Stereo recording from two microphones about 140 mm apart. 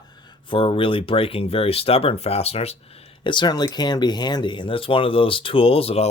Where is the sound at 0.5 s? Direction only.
40° left (ahead or behind).